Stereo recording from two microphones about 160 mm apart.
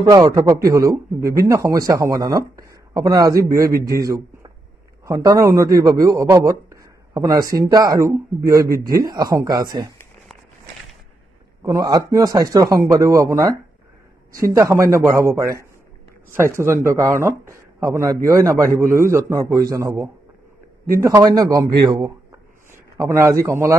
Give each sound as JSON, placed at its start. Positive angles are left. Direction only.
{"t": 0.0, "sound": "a man's voice", "side_deg": -20}
{"t": 11.6, "sound": "a man's voice", "side_deg": -20}